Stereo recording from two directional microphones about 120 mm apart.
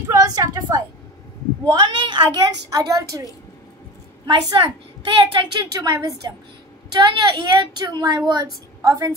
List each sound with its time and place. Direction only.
0.1 s a woman's voice: 30° right (ahead or behind)
4.3 s a woman's voice: 40° right (ahead or behind)